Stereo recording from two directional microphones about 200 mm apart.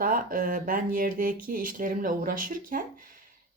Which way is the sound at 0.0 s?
45° right (ahead or behind).